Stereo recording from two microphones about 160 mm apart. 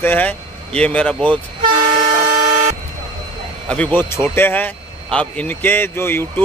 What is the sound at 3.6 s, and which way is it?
Speech, 10° left (ahead or behind).